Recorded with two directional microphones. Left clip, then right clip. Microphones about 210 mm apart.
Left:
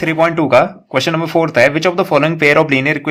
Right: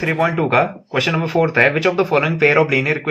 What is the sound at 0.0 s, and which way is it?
Speech, 40° left (ahead or behind).